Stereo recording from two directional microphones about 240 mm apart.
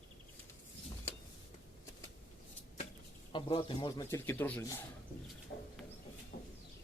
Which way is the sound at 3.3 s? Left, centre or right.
Centre.